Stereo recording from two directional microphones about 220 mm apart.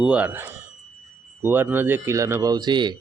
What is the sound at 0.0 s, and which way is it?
Speech, 5° right (ahead or behind).